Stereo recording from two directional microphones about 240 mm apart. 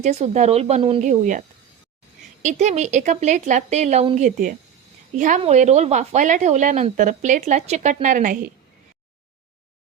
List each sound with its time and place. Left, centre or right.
0.0 s speech: right